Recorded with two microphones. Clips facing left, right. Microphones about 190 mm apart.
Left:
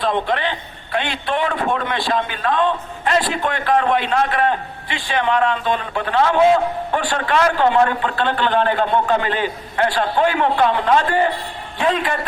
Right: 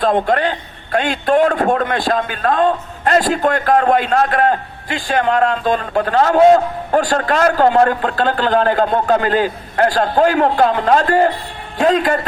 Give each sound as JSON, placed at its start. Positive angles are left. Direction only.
{"t": 0.0, "sound": "a man's voice", "side_deg": -45}